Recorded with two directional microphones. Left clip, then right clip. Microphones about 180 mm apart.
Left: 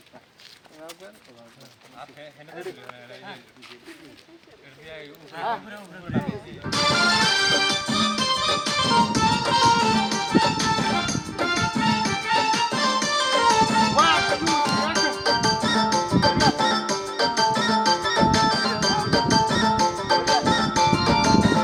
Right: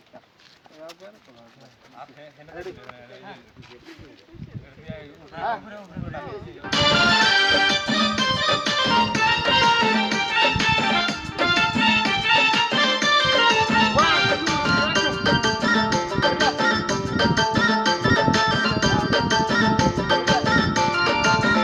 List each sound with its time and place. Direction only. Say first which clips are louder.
4.9 s speech: even; centre (ahead or behind)
6.6 s music: right 3 dB; 35° right (ahead or behind)